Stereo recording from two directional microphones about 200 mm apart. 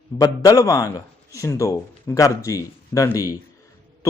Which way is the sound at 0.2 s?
15° left (ahead or behind).